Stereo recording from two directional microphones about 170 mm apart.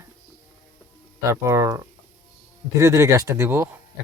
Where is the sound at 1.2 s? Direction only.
15° right (ahead or behind).